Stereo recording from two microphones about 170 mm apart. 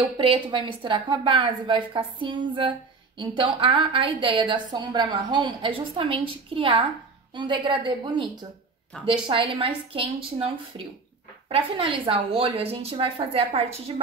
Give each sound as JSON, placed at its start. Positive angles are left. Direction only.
{"t": 0.0, "sound": "a woman's voice", "side_deg": -30}
{"t": 8.9, "sound": "a woman's voice", "side_deg": 5}
{"t": 9.3, "sound": "a woman's voice", "side_deg": -30}